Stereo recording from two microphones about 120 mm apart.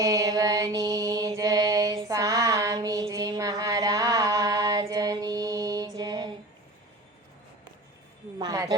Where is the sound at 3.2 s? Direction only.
30° right (ahead or behind).